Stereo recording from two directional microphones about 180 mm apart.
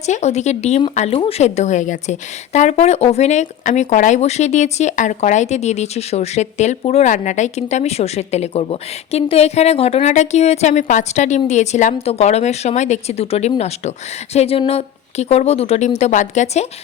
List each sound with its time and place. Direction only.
0.0 s a woman's voice: 40° left (ahead or behind)